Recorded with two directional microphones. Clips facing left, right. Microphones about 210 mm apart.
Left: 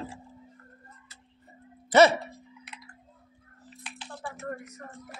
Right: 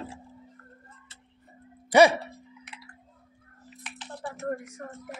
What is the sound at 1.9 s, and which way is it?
Speech, 15° right (ahead or behind).